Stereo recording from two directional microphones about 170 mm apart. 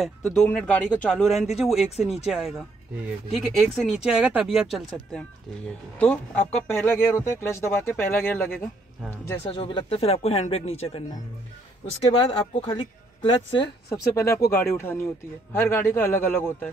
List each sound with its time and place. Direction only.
0.0 s speech: 5° left (ahead or behind)
2.0 s speech: 40° left (ahead or behind)
2.2 s speech: centre (ahead or behind)
9.5 s speech: 30° left (ahead or behind)
12.1 s speech: 30° left (ahead or behind)
13.6 s speech: 20° left (ahead or behind)